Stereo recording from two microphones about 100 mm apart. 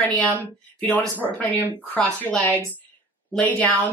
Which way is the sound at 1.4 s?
20° left (ahead or behind).